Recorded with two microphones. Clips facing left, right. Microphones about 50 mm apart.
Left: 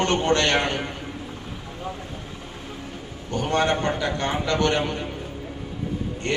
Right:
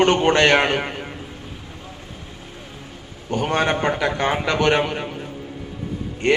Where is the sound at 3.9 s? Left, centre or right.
Right.